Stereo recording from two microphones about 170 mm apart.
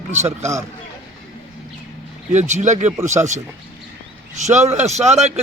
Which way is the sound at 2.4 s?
45° right (ahead or behind).